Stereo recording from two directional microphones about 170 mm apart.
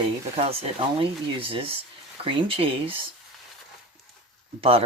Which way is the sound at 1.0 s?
30° right (ahead or behind).